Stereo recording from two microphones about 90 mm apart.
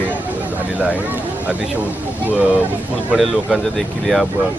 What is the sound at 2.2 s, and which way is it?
Speech, 15° right (ahead or behind).